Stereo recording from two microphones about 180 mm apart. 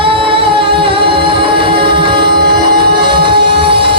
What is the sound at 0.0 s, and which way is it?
Music, 30° right (ahead or behind).